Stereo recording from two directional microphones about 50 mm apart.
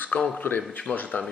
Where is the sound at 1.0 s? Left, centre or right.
Left.